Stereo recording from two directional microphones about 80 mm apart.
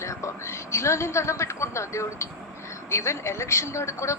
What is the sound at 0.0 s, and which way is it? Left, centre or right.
A woman's voice, left.